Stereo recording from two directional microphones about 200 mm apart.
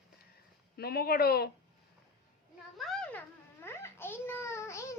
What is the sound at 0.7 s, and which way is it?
Speech, 50° left (ahead or behind).